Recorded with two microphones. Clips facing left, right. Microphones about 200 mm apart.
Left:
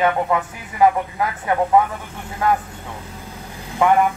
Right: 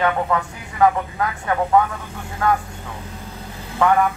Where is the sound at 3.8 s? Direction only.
20° left (ahead or behind).